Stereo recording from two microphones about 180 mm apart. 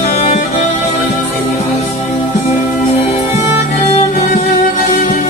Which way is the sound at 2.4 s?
35° left (ahead or behind).